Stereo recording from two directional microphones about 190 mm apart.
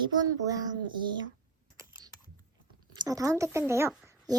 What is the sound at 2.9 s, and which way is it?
Speech, 20° right (ahead or behind).